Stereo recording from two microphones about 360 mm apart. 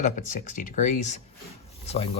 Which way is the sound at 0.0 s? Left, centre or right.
Left.